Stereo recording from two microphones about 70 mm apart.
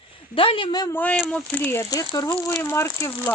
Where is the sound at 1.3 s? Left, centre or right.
Centre.